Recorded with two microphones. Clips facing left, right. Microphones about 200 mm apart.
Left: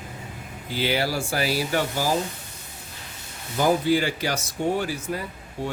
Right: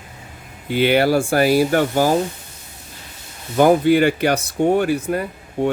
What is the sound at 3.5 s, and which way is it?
Speech, 60° right (ahead or behind).